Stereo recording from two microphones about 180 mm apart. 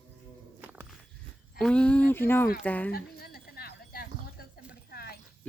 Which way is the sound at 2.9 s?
55° left (ahead or behind).